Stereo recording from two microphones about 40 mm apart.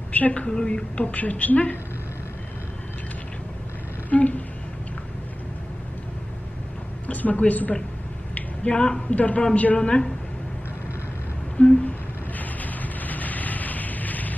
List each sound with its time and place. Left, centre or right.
0.1 s a woman's voice: left
0.5 s a woman's voice: left
1.0 s a woman's voice: left
4.1 s a sound: left
7.1 s a woman's voice: left
8.7 s a woman's voice: centre
9.1 s a woman's voice: left
9.8 s a woman's voice: left
11.5 s a sound: left
12.4 s a sound: left